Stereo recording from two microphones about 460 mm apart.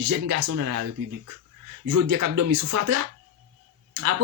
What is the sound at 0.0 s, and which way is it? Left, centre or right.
Speech, right.